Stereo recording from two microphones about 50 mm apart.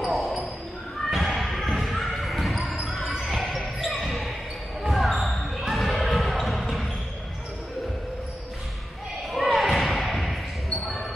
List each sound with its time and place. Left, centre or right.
0.0 s basketball bounce: centre
9.3 s thump: centre